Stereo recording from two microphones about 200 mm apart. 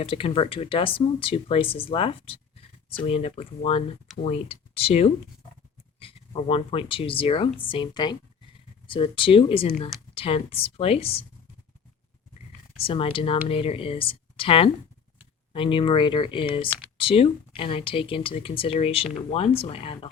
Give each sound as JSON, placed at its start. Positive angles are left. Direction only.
{"t": 0.0, "sound": "speech", "side_deg": 30}
{"t": 12.8, "sound": "speech", "side_deg": 30}